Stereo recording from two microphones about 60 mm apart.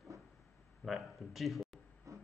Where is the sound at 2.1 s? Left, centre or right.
Right.